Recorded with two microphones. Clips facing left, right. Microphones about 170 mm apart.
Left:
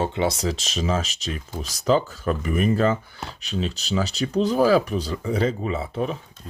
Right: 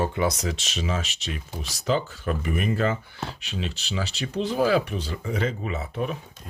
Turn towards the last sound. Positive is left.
turn(degrees=30)  # may be behind; listen again after turning